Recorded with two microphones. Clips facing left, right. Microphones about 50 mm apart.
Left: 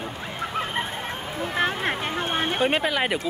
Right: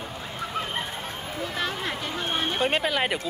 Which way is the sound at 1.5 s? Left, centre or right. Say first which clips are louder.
Left 7 dB; left.